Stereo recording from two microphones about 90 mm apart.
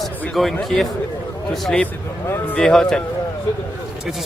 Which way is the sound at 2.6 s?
5° left (ahead or behind).